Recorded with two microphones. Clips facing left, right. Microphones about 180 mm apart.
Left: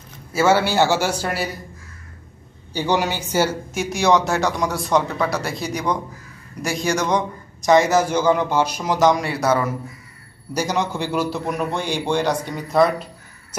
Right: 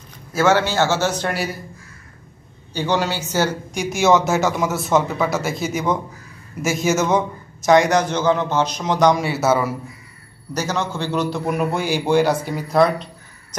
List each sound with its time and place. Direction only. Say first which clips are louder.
0.3 s a man's voice: even; 10° left (ahead or behind)
2.7 s speech: even; 15° left (ahead or behind); by 9.8 s 5° right (ahead or behind)
10.5 s speech: left 1 dB; 15° left (ahead or behind)